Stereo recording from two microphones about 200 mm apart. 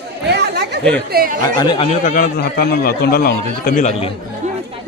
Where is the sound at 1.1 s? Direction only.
45° right (ahead or behind).